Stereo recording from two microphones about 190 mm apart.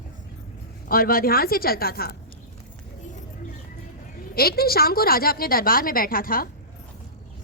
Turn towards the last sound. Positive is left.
turn(degrees=50)  # may be behind; listen again after turning